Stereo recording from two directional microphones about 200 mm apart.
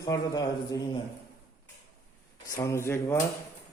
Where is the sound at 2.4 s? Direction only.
15° left (ahead or behind).